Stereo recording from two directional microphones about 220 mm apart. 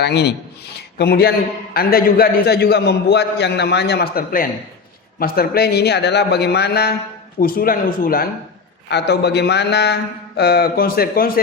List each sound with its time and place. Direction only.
0.0 s a man's voice: 50° left (ahead or behind)